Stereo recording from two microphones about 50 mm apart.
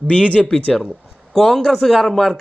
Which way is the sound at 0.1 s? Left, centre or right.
Left.